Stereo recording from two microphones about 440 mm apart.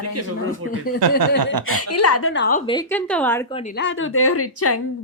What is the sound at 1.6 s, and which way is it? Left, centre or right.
Speech, left.